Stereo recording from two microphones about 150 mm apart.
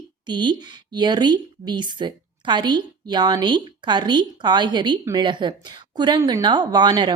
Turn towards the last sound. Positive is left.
turn(degrees=-30)  # may be behind; listen again after turning